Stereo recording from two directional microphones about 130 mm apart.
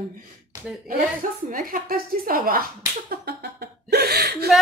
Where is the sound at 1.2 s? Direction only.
90° right.